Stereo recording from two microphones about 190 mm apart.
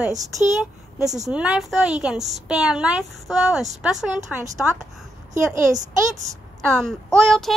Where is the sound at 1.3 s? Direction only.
5° right (ahead or behind).